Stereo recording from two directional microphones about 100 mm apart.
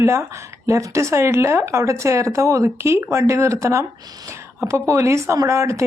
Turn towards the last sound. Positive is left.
turn(degrees=-30)  # may be behind; listen again after turning